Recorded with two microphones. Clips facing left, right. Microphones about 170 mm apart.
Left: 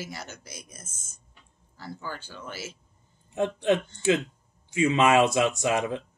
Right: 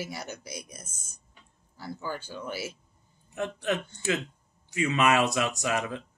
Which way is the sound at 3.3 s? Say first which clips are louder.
Left 6 dB; 25° left (ahead or behind).